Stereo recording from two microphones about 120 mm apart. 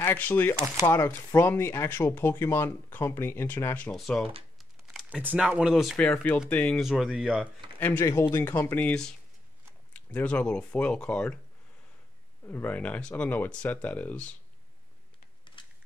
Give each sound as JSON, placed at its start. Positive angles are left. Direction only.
{"t": 0.0, "sound": "speech", "side_deg": 15}
{"t": 0.6, "sound": "speech", "side_deg": -20}
{"t": 0.8, "sound": "speech", "side_deg": 20}
{"t": 3.9, "sound": "speech", "side_deg": 0}
{"t": 4.6, "sound": "a sound", "side_deg": 0}
{"t": 5.2, "sound": "speech", "side_deg": -15}
{"t": 5.9, "sound": "speech", "side_deg": 10}
{"t": 6.8, "sound": "speech", "side_deg": -5}
{"t": 7.8, "sound": "speech", "side_deg": 15}
{"t": 12.4, "sound": "speech", "side_deg": 15}
{"t": 15.5, "sound": "a sound", "side_deg": 45}